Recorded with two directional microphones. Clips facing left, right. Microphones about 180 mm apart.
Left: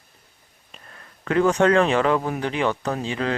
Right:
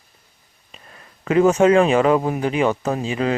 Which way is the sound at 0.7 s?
10° right (ahead or behind).